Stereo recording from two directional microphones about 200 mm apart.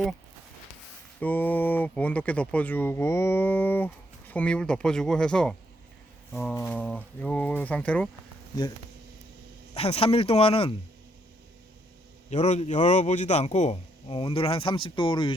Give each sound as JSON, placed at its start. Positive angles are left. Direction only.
{"t": 1.2, "sound": "speech", "side_deg": 10}
{"t": 9.7, "sound": "speech", "side_deg": 30}
{"t": 12.3, "sound": "a man's voice", "side_deg": 35}